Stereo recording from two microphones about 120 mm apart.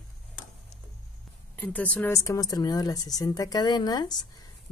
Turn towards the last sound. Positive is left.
turn(degrees=35)  # may be behind; listen again after turning